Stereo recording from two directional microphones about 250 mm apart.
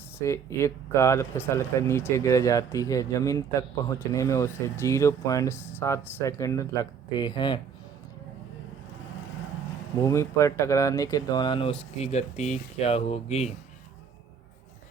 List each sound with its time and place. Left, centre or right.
0.2 s speech: centre
10.0 s speech: centre